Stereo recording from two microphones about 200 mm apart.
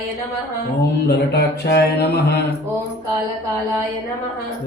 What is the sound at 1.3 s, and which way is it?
Speech, 55° left (ahead or behind).